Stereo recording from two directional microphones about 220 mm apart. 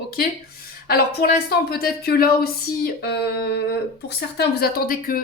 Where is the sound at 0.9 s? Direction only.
45° left (ahead or behind).